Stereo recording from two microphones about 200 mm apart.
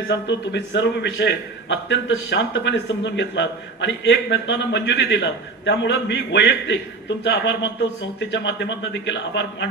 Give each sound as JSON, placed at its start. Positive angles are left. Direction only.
{"t": 0.1, "sound": "a man's voice", "side_deg": 60}